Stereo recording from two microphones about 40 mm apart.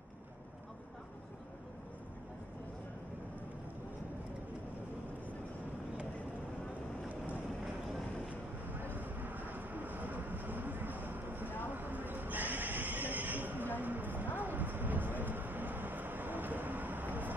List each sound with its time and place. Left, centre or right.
8.7 s vehicle: right
11.7 s neigh: right
13.7 s a sound: right